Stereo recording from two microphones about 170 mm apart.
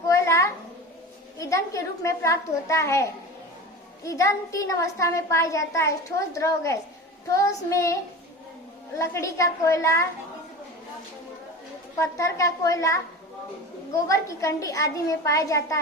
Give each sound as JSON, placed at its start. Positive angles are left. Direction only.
{"t": 0.1, "sound": "a sound", "side_deg": 15}
{"t": 1.4, "sound": "a woman's voice", "side_deg": 20}
{"t": 9.0, "sound": "a woman's voice", "side_deg": 15}
{"t": 11.9, "sound": "a child's voice", "side_deg": 15}
{"t": 14.1, "sound": "a child's voice", "side_deg": 20}